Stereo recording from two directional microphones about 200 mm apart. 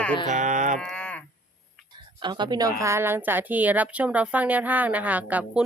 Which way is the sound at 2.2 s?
20° right (ahead or behind).